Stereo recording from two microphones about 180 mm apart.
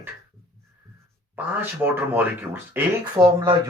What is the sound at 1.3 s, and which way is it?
Speech, 10° right (ahead or behind).